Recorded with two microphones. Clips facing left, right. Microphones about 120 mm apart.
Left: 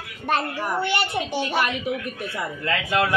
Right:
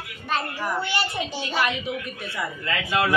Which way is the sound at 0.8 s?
60° left (ahead or behind).